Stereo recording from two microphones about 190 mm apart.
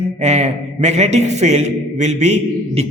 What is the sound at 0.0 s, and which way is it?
A man's voice, 35° right (ahead or behind).